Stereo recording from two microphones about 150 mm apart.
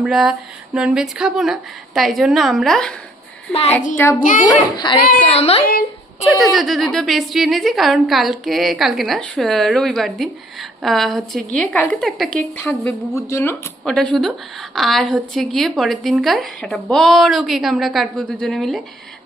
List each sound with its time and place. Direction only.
0.0 s a woman's voice: centre (ahead or behind)
3.9 s speech: 15° left (ahead or behind)
4.2 s a child's voice: 60° left (ahead or behind)
4.5 s a child's voice: 30° left (ahead or behind)
5.3 s a woman's voice: 45° left (ahead or behind)
6.2 s a woman's voice: centre (ahead or behind); by 13.6 s 20° left (ahead or behind)
13.8 s a woman's voice: 5° left (ahead or behind)